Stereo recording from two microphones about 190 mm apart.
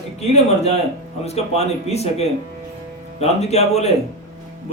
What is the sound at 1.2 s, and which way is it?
Speech, 35° left (ahead or behind).